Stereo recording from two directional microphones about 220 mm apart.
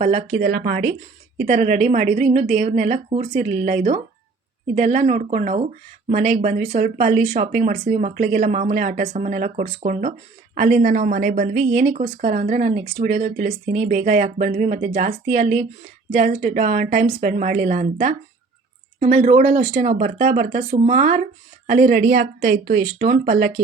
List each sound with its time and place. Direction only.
0.0 s speech: 35° right (ahead or behind)